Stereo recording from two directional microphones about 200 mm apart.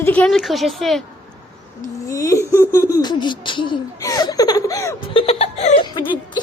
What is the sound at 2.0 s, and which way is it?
Speech, 15° left (ahead or behind).